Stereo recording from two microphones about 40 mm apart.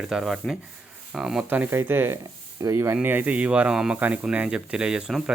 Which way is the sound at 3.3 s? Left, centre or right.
Right.